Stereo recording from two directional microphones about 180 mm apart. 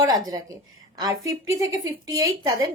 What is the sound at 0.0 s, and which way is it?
A woman's voice, 20° right (ahead or behind).